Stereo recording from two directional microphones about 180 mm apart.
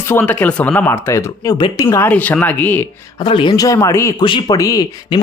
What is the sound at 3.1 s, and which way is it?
Speech, 25° left (ahead or behind).